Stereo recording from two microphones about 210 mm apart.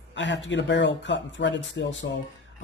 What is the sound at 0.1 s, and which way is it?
Speech, 60° left (ahead or behind).